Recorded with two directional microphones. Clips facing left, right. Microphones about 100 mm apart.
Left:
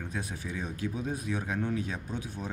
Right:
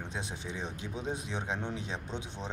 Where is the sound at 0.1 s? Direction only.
25° right (ahead or behind).